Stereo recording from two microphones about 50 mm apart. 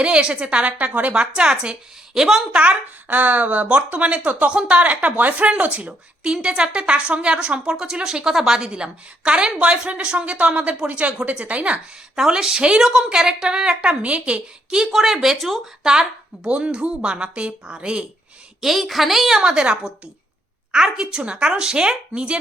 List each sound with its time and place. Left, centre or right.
0.0 s a woman's voice: centre
1.1 s a woman's voice: centre
2.5 s a woman's voice: right
6.2 s a woman's voice: centre
12.1 s a woman's voice: centre
15.8 s a woman's voice: centre
18.6 s a woman's voice: centre
19.4 s a woman's voice: centre